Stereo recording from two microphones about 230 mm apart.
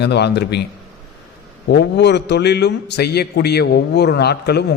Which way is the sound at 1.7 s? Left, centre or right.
Left.